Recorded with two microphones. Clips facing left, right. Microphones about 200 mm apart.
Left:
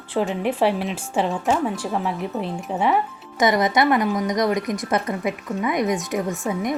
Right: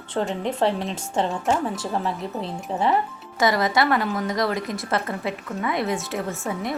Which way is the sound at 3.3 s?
20° left (ahead or behind).